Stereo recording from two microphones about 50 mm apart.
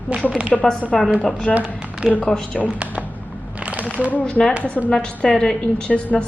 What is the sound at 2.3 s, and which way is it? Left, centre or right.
Speech, centre.